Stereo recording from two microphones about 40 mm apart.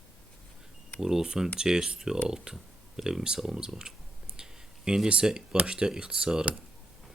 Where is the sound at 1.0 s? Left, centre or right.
Centre.